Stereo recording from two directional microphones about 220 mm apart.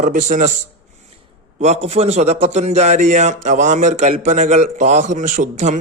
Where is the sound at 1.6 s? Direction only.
30° right (ahead or behind).